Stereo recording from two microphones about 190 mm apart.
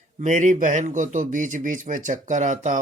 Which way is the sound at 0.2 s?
40° right (ahead or behind).